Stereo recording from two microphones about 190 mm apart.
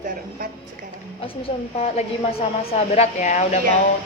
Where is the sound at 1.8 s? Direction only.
35° left (ahead or behind).